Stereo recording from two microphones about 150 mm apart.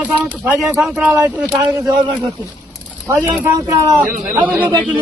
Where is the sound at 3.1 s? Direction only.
20° right (ahead or behind).